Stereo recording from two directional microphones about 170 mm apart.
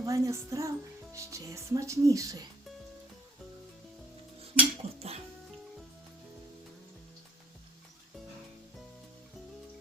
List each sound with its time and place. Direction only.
0.0 s speech: 20° right (ahead or behind)
4.8 s music: 35° right (ahead or behind)